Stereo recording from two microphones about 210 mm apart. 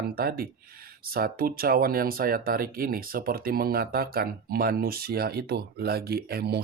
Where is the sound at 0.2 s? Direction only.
45° right (ahead or behind).